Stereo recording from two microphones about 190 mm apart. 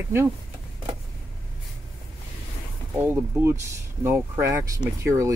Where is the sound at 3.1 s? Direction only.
10° right (ahead or behind).